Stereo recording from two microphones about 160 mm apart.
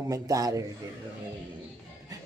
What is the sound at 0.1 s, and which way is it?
Speech, 20° right (ahead or behind).